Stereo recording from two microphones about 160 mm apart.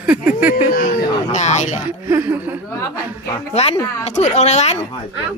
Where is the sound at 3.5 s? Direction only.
40° left (ahead or behind).